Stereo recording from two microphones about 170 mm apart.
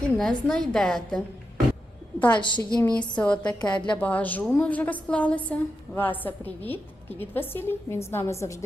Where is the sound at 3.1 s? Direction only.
5° left (ahead or behind).